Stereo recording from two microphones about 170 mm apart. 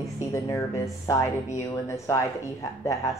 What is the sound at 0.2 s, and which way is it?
A woman's voice, 20° left (ahead or behind).